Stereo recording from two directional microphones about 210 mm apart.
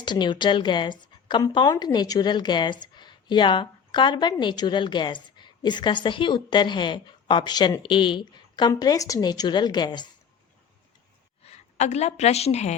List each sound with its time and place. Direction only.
0.0 s a woman's voice: 20° left (ahead or behind)
11.4 s a woman's voice: 30° left (ahead or behind)